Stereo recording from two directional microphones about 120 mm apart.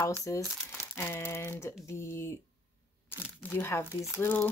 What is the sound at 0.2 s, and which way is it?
Speech, 25° left (ahead or behind).